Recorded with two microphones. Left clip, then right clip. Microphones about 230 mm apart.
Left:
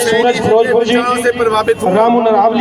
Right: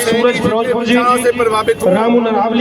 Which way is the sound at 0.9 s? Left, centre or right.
Centre.